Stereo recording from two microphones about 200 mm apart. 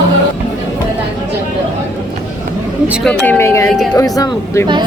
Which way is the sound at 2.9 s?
Centre (ahead or behind).